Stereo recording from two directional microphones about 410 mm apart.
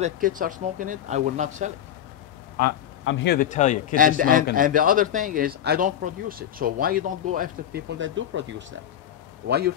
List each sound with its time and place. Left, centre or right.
0.0 s speech: centre
2.5 s a sound: left
3.2 s speech: left
4.2 s speech: centre